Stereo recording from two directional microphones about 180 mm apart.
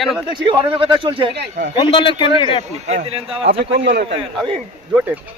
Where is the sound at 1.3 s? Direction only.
60° right (ahead or behind).